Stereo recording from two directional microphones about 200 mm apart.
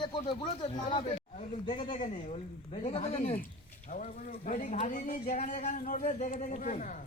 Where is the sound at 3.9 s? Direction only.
40° left (ahead or behind).